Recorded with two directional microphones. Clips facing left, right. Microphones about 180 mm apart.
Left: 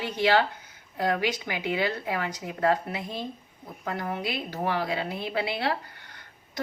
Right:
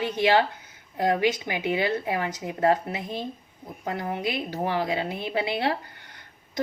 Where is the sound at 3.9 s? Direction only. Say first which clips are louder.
Right 2 dB; 20° right (ahead or behind).